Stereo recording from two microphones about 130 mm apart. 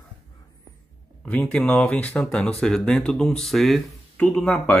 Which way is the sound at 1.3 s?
10° left (ahead or behind).